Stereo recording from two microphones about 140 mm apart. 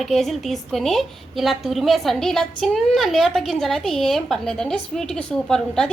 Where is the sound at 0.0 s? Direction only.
Centre (ahead or behind).